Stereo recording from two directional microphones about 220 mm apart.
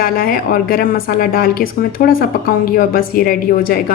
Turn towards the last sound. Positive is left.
turn(degrees=40)  # may be behind; listen again after turning